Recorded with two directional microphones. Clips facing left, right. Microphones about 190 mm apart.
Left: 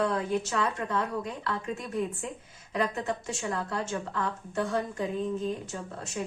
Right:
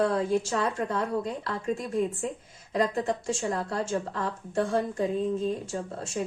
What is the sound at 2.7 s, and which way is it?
A woman's voice, 35° right (ahead or behind).